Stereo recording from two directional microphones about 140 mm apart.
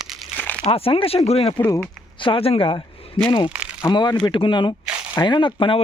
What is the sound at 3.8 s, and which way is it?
Speech, 30° left (ahead or behind).